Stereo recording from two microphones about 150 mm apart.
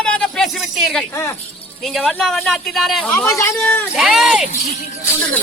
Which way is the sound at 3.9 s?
Centre (ahead or behind).